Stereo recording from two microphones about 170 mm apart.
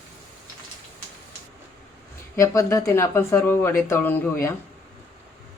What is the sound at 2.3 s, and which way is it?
Speech, 20° left (ahead or behind).